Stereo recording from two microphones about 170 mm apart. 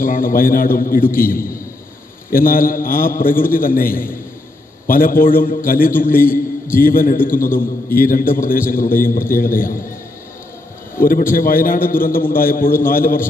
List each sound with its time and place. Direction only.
0.0 s a man's voice: 55° left (ahead or behind)
11.0 s a man's voice: 55° left (ahead or behind)